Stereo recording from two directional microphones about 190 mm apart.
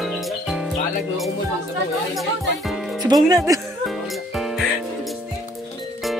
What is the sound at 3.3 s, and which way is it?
Speech, 20° right (ahead or behind).